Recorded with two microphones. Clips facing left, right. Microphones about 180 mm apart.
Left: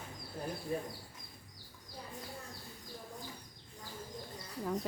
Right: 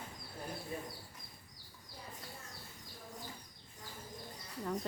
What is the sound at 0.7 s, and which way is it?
Speech, 35° left (ahead or behind).